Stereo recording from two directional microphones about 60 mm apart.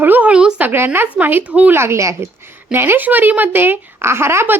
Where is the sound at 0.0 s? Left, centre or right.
Right.